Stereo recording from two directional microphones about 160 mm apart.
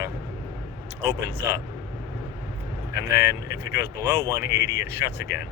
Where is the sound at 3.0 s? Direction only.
15° right (ahead or behind).